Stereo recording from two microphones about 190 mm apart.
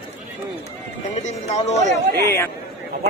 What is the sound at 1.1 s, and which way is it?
Speech, 35° left (ahead or behind).